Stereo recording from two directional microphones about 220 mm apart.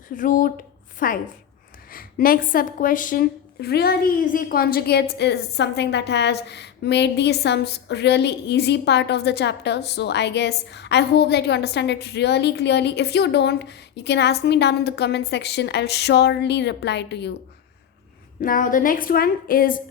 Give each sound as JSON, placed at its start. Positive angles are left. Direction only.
{"t": 0.2, "sound": "a woman's voice", "side_deg": 35}
{"t": 18.4, "sound": "a woman's voice", "side_deg": 40}